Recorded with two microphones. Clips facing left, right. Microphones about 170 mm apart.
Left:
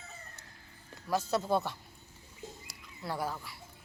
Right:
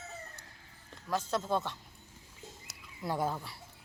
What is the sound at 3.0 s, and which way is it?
Speech, 20° right (ahead or behind).